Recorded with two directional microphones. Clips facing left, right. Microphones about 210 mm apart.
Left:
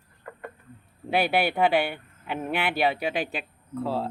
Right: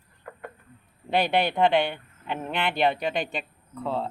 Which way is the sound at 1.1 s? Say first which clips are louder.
Even; 5° left (ahead or behind).